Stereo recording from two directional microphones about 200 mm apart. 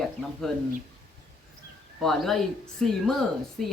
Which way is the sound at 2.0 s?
Centre (ahead or behind).